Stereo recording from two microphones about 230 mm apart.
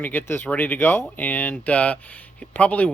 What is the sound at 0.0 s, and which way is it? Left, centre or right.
Speech, centre.